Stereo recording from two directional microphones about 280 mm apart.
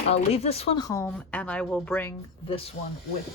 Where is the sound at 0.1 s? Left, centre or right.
Left.